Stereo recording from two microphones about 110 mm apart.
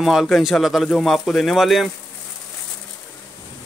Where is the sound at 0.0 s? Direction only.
Centre (ahead or behind).